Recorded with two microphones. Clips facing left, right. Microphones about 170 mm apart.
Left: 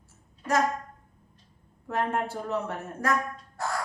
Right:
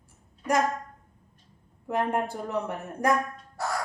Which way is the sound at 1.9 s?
15° right (ahead or behind).